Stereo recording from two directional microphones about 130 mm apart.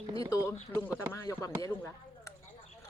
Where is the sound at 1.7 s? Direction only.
20° left (ahead or behind).